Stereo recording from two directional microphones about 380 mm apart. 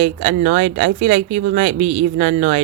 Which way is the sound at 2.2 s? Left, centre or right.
Centre.